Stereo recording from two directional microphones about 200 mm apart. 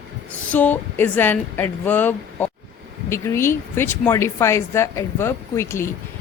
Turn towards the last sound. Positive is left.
turn(degrees=15)  # may be behind; listen again after turning